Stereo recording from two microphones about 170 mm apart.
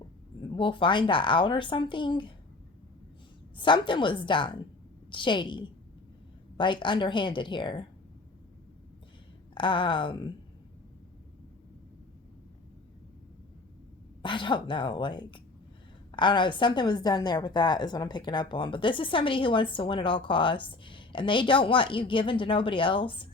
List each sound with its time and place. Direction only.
0.4 s a woman's voice: 30° left (ahead or behind)
3.6 s a woman's voice: 30° left (ahead or behind)
9.6 s a woman's voice: 30° left (ahead or behind)
14.2 s a woman's voice: 30° left (ahead or behind)